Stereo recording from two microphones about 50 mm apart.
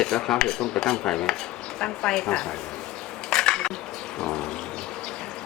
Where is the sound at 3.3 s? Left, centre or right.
Centre.